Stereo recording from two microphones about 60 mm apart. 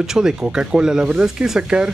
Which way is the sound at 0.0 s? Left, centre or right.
Centre.